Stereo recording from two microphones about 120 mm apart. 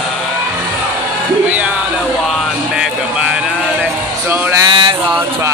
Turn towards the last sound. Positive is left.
turn(degrees=-40)  # may be behind; listen again after turning